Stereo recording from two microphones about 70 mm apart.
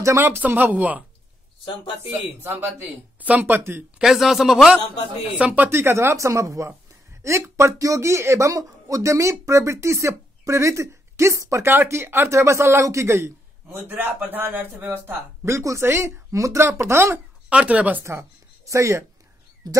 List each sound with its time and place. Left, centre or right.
0.0 s speech: right
0.5 s speech: right
2.0 s speech: right
4.0 s speech: centre
5.4 s speech: right
5.7 s speech: right
13.8 s speech: right
15.4 s speech: right
17.5 s speech: centre
18.7 s speech: right
19.6 s speech: right